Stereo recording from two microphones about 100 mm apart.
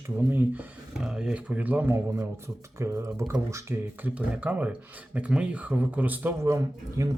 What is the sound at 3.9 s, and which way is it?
Speech, 15° right (ahead or behind).